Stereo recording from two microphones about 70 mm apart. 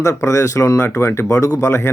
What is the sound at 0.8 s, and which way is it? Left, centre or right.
Speech, left.